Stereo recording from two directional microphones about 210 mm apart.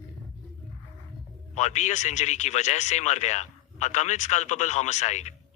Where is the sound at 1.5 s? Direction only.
35° left (ahead or behind).